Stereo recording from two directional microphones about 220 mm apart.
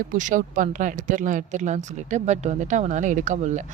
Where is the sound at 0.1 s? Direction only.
35° right (ahead or behind).